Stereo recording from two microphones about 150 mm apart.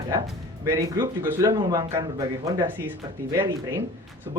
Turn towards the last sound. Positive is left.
turn(degrees=-25)  # may be behind; listen again after turning